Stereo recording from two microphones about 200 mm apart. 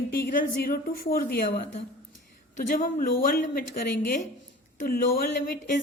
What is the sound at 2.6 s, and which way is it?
A woman's voice, 40° left (ahead or behind).